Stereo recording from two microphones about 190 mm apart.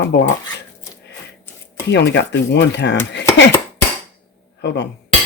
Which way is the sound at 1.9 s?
60° left (ahead or behind).